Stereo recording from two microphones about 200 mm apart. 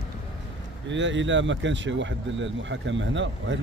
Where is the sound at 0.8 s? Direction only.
65° right (ahead or behind).